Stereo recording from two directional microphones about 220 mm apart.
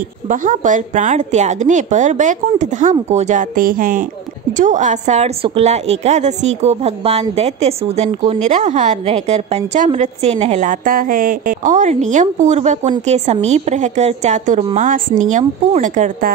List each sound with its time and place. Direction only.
0.3 s a woman's voice: 35° right (ahead or behind)